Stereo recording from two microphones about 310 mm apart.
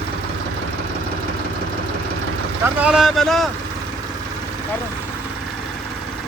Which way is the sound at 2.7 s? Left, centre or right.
Centre.